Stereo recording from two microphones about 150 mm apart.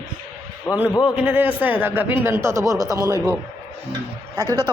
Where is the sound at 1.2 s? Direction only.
10° right (ahead or behind).